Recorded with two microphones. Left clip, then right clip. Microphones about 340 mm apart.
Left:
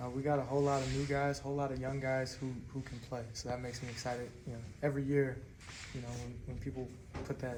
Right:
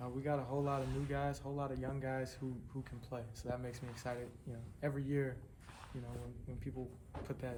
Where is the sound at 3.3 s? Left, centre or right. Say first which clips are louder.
Left 2 dB; centre.